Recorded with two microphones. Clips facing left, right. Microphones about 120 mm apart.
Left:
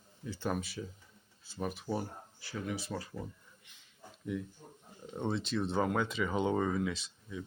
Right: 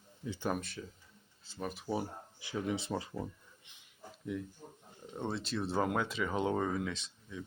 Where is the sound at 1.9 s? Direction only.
15° right (ahead or behind).